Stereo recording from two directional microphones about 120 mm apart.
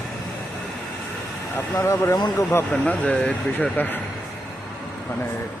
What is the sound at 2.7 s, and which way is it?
Speech, 10° left (ahead or behind).